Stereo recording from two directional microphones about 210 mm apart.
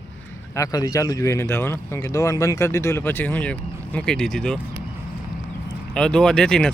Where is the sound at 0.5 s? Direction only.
15° left (ahead or behind).